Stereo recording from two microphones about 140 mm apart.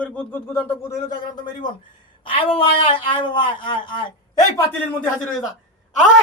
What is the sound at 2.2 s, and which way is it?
A woman's voice, 40° left (ahead or behind).